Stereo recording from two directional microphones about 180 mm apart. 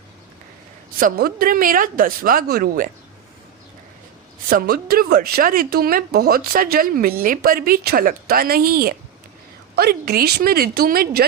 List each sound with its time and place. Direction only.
0.9 s speech: 50° right (ahead or behind)
4.4 s speech: 50° right (ahead or behind)